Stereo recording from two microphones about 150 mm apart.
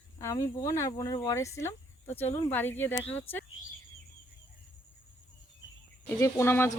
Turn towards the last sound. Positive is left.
turn(degrees=15)  # may be behind; listen again after turning